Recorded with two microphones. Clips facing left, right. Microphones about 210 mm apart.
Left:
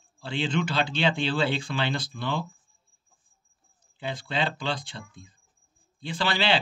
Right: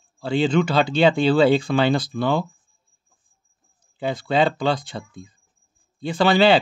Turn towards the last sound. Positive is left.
turn(degrees=-45)  # may be behind; listen again after turning